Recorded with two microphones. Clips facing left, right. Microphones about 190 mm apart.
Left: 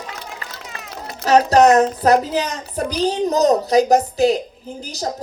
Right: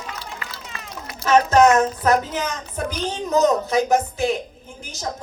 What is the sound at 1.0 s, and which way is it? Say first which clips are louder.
A woman's voice: left 3 dB; 35° left (ahead or behind).